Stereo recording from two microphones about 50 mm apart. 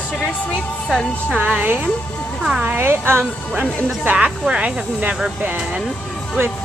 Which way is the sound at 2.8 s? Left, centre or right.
Right.